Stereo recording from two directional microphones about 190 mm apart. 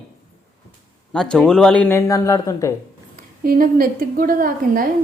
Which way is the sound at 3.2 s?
45° right (ahead or behind).